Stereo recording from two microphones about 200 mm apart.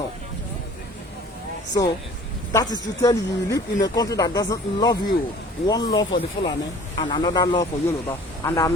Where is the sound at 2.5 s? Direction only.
20° left (ahead or behind).